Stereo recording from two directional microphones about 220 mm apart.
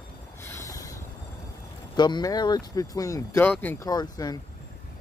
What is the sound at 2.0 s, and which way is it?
Speech, 20° left (ahead or behind).